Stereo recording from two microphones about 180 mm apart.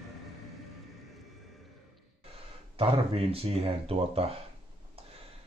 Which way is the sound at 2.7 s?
30° right (ahead or behind).